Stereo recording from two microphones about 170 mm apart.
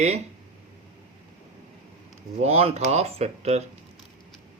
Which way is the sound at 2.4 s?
35° right (ahead or behind).